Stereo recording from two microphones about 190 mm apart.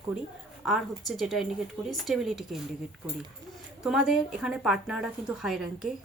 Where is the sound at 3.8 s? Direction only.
Centre (ahead or behind).